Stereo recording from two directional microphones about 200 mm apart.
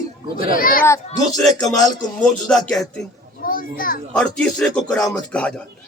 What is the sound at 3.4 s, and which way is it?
Speech, 45° left (ahead or behind).